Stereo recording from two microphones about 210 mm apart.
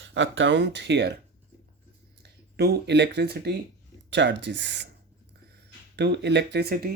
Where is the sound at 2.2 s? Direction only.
50° right (ahead or behind).